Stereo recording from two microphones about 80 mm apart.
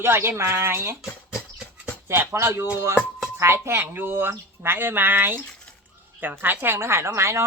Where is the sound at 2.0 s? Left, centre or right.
Right.